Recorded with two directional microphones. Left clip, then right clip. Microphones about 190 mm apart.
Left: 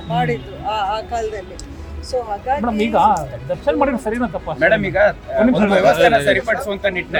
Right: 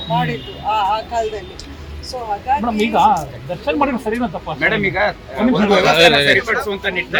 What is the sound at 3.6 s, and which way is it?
Speech, 15° right (ahead or behind).